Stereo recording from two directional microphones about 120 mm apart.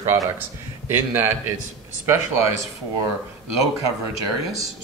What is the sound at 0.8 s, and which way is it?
Speech, 20° right (ahead or behind).